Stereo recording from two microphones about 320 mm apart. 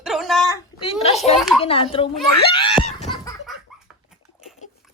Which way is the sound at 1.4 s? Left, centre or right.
Centre.